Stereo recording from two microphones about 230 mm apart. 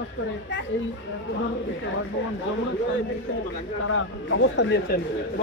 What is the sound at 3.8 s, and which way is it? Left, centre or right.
Speech, left.